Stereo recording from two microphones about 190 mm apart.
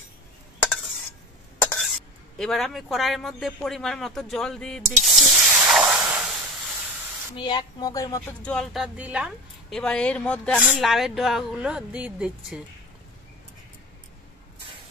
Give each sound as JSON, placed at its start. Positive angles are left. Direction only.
{"t": 2.3, "sound": "a man's voice", "side_deg": 0}
{"t": 7.3, "sound": "speech", "side_deg": 25}
{"t": 8.4, "sound": "speech", "side_deg": 5}